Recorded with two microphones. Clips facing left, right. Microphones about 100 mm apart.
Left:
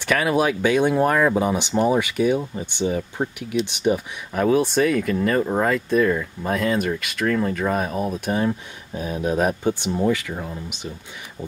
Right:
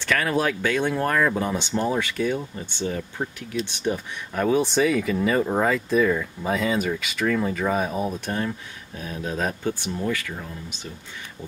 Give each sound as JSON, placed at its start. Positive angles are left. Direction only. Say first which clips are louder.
{"t": 0.0, "sound": "speech", "louder": "left 3 dB", "side_deg": 15}
{"t": 8.5, "sound": "speech", "louder": "left 6 dB", "side_deg": 20}